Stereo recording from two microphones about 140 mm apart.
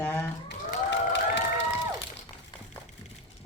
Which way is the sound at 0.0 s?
15° left (ahead or behind).